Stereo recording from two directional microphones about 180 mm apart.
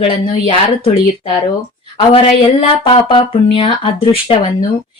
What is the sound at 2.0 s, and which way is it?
A woman's voice, 30° left (ahead or behind).